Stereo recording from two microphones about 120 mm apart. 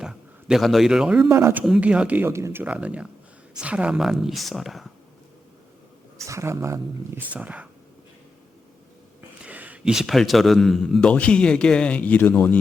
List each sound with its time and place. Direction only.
0.0 s a man's voice: 5° right (ahead or behind)
1.3 s speech: 20° right (ahead or behind)
1.6 s a man's voice: 5° right (ahead or behind)
6.2 s speech: 25° right (ahead or behind)
7.2 s speech: 10° right (ahead or behind)
9.4 s a man's voice: 10° right (ahead or behind); by 12.5 s 15° left (ahead or behind)